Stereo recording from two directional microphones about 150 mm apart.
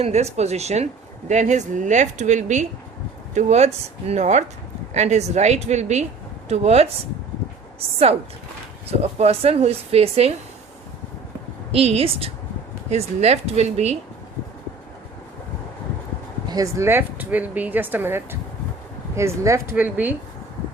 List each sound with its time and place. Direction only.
0.0 s a woman's voice: 45° right (ahead or behind)
11.7 s a woman's voice: 40° right (ahead or behind)
16.5 s speech: 20° right (ahead or behind)